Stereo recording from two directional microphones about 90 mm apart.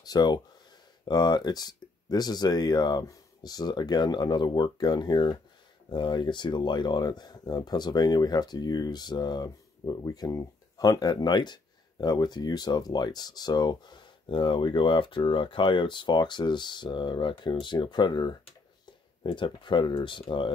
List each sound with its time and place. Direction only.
0.0 s speech: 50° left (ahead or behind); by 20.5 s 65° left (ahead or behind)